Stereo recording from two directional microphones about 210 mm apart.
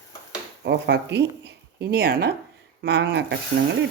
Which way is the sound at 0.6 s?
55° right (ahead or behind).